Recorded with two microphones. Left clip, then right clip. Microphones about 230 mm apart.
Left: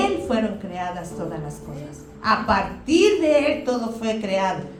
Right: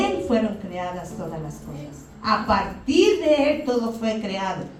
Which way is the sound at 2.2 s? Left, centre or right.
Left.